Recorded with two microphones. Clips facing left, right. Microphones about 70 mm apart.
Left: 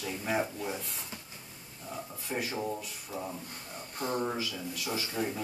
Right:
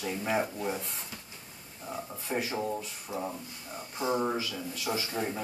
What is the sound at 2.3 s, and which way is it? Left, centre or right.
Speech, centre.